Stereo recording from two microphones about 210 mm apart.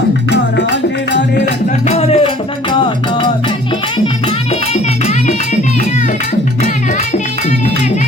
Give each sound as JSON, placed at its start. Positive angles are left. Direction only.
{"t": 1.9, "sound": "speech", "side_deg": 30}